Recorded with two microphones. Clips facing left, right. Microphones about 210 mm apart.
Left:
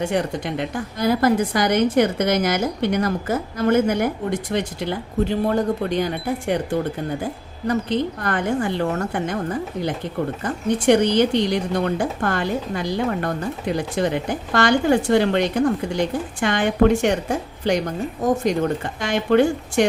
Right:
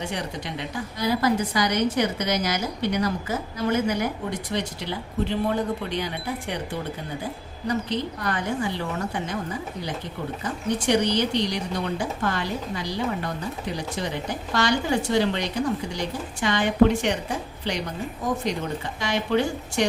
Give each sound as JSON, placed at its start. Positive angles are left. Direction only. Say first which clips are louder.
{"t": 0.0, "sound": "a woman's voice", "louder": "left 8 dB", "side_deg": 50}
{"t": 7.7, "sound": "a woman's voice", "louder": "left 5 dB", "side_deg": 55}